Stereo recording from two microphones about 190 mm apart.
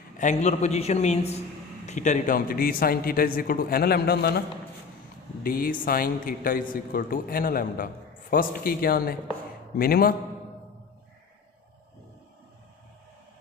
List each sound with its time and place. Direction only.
0.2 s a man's voice: 40° left (ahead or behind); by 4.4 s 55° left (ahead or behind)
5.4 s a man's voice: 50° left (ahead or behind)